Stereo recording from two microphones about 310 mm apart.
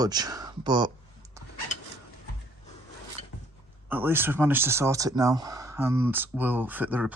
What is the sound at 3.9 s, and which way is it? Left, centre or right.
Speech, centre.